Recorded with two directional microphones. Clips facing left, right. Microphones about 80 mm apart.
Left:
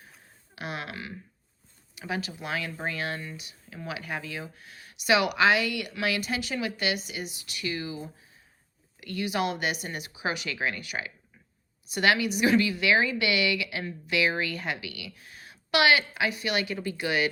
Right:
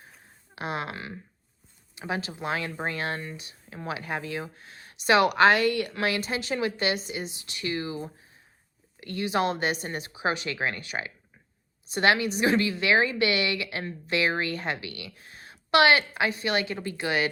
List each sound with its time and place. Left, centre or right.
0.5 s speech: right